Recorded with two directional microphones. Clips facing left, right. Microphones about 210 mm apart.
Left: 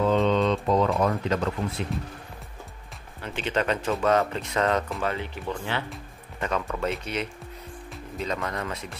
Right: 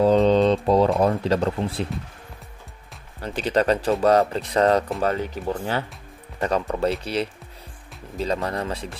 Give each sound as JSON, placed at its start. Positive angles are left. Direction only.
{"t": 0.0, "sound": "a sound", "side_deg": -35}
{"t": 3.2, "sound": "speech", "side_deg": -40}
{"t": 6.7, "sound": "speech", "side_deg": -35}